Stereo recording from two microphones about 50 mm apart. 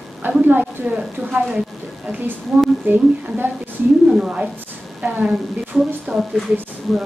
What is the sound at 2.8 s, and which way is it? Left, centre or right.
Speech, right.